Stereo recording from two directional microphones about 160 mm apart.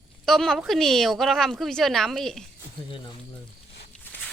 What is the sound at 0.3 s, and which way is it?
A woman's voice, centre (ahead or behind).